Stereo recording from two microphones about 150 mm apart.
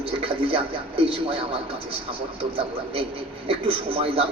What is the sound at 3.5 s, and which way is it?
Speech, 40° right (ahead or behind).